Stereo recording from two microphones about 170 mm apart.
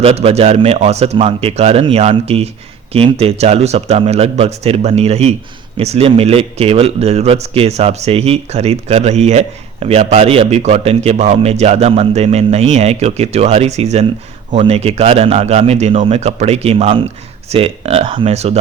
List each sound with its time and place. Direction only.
0.0 s speech: 35° right (ahead or behind)